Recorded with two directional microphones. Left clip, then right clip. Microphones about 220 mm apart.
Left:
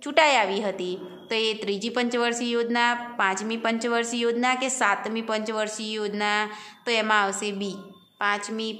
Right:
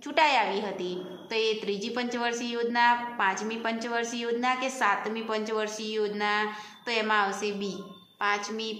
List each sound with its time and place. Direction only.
0.1 s a woman's voice: 45° left (ahead or behind)